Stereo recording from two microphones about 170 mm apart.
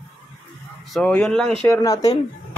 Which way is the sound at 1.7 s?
20° left (ahead or behind).